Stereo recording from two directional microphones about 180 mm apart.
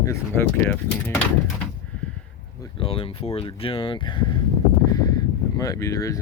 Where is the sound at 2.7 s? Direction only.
30° left (ahead or behind).